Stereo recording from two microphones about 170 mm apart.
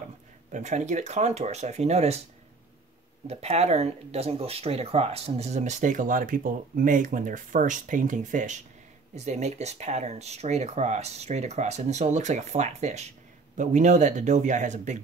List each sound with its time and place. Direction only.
0.5 s speech: 45° right (ahead or behind)
3.3 s speech: 40° right (ahead or behind)